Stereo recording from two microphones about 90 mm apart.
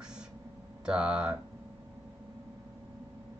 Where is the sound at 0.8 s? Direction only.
10° right (ahead or behind).